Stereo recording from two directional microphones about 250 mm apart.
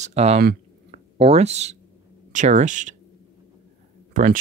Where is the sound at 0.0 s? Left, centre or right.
Right.